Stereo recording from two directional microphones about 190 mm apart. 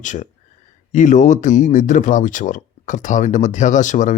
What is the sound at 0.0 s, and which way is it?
Speech, 40° left (ahead or behind).